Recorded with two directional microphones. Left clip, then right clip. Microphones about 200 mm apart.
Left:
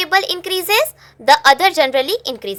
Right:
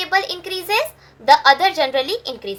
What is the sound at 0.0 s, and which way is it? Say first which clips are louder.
A child's voice: left 3 dB; 45° left (ahead or behind).